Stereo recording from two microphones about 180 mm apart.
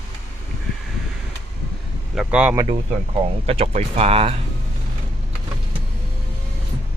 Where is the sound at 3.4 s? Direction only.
35° right (ahead or behind).